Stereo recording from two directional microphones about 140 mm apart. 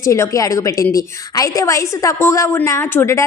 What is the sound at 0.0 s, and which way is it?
A woman's voice, 20° left (ahead or behind).